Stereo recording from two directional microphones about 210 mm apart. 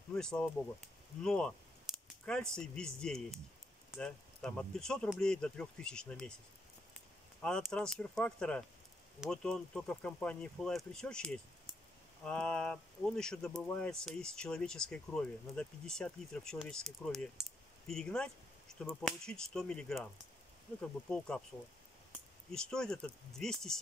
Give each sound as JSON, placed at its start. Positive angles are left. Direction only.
{"t": 0.1, "sound": "speech", "side_deg": 5}
{"t": 7.4, "sound": "speech", "side_deg": 5}
{"t": 22.5, "sound": "speech", "side_deg": 5}